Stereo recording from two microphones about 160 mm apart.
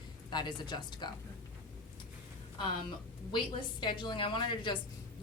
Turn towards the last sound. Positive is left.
turn(degrees=30)  # may be behind; listen again after turning